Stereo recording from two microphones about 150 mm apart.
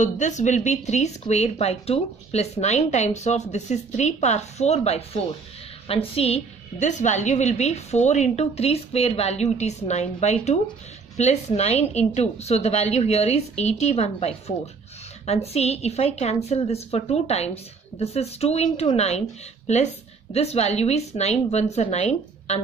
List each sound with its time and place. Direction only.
0.0 s speech: 55° left (ahead or behind)